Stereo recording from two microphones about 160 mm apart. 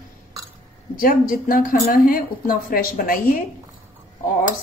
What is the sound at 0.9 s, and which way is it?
Speech, 60° left (ahead or behind).